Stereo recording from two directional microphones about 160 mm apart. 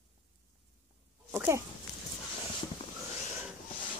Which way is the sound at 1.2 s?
15° right (ahead or behind).